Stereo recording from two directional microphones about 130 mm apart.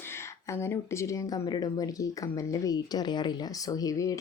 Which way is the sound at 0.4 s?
20° left (ahead or behind).